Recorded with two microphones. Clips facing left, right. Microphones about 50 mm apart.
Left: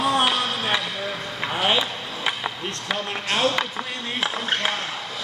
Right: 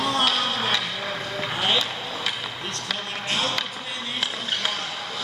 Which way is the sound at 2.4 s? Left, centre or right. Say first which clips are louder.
Left 3 dB; left.